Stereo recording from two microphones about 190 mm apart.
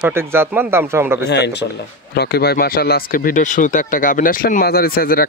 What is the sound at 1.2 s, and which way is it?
Speech, 65° left (ahead or behind).